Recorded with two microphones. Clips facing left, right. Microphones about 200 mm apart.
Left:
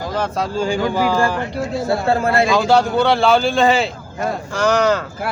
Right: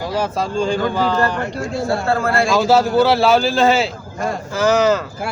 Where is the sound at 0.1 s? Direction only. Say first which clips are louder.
Even; 10° right (ahead or behind).